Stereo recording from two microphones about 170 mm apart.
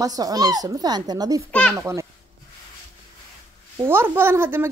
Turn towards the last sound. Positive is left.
turn(degrees=-15)  # may be behind; listen again after turning